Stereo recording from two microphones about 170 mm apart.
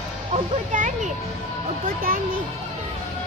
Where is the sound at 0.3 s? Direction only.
45° right (ahead or behind).